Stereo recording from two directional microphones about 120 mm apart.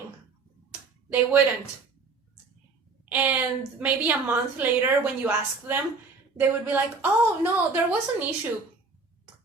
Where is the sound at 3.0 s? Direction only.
15° right (ahead or behind).